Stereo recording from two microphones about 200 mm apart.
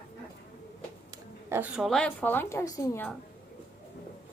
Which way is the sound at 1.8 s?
5° left (ahead or behind).